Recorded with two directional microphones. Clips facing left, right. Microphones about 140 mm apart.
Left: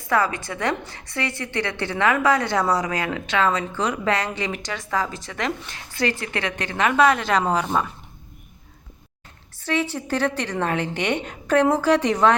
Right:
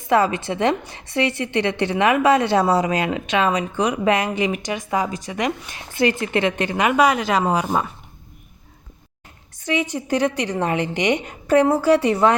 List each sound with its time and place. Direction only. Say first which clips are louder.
0.1 s a woman's voice: right 4 dB; 20° right (ahead or behind)
9.6 s a woman's voice: right 1 dB; 15° right (ahead or behind)